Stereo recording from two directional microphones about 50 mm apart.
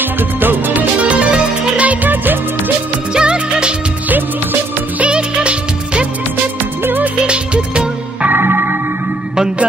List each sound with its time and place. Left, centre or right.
0.0 s music: right
3.2 s music: centre
4.1 s music: right
5.1 s music of bollywood: right
6.8 s music: right
7.2 s music: right
8.3 s music: right